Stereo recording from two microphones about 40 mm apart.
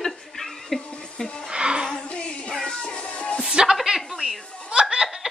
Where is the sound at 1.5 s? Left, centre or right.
Right.